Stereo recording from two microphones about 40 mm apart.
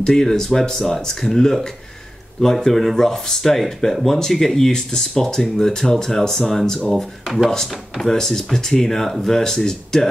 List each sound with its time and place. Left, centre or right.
0.0 s speech: centre